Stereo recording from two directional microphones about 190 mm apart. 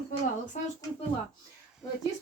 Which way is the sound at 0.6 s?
40° left (ahead or behind).